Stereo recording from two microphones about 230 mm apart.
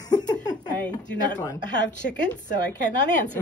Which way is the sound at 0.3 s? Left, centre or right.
Centre.